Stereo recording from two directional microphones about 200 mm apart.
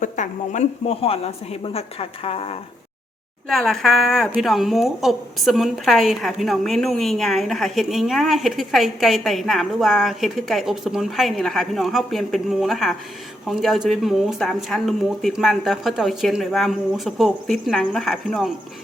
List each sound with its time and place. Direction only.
0.0 s a woman's voice: 40° left (ahead or behind)
3.5 s a woman's voice: centre (ahead or behind)